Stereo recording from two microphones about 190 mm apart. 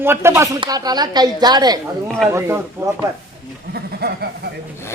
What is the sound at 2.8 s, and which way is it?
Speech, 15° right (ahead or behind).